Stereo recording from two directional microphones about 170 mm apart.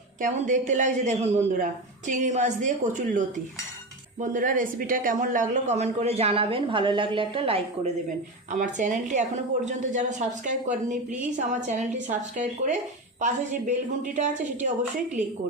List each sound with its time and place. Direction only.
0.2 s a woman's voice: 45° right (ahead or behind)
8.5 s a woman's voice: 45° right (ahead or behind)